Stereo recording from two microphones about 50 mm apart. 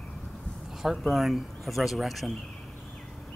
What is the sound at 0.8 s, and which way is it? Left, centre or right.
Speech, centre.